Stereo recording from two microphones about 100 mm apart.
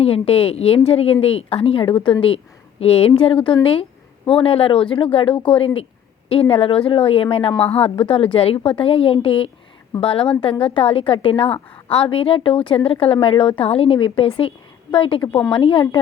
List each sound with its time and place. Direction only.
0.0 s a woman's voice: 70° left (ahead or behind)
2.8 s a woman's voice: 75° left (ahead or behind); by 13.5 s 60° left (ahead or behind)
13.6 s a woman's voice: 70° left (ahead or behind)